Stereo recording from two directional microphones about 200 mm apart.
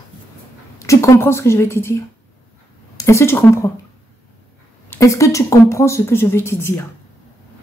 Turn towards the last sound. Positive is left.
turn(degrees=10)  # may be behind; listen again after turning